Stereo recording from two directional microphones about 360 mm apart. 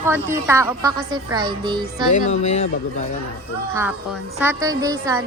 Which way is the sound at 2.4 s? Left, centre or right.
Centre.